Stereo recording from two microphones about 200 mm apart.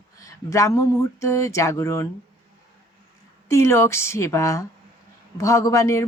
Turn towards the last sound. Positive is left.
turn(degrees=15)  # may be behind; listen again after turning